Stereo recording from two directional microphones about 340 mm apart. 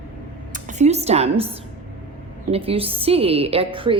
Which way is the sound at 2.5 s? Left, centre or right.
Centre.